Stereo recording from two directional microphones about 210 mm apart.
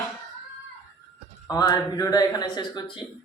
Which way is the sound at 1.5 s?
15° left (ahead or behind).